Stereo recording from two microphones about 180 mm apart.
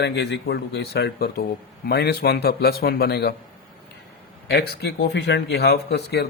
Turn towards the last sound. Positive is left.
turn(degrees=65)  # may be behind; listen again after turning